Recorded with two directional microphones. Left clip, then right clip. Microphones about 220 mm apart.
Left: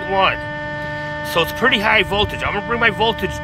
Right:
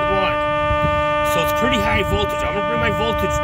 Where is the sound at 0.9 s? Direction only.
25° right (ahead or behind).